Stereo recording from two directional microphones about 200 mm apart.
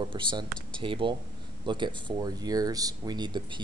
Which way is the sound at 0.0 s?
25° right (ahead or behind).